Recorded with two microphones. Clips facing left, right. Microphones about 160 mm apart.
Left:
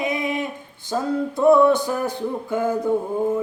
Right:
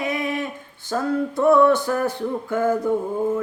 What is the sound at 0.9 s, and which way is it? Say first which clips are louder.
Music: right 1 dB; 15° left (ahead or behind).